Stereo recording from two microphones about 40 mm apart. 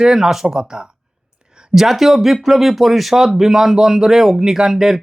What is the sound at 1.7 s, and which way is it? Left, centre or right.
Speech, centre.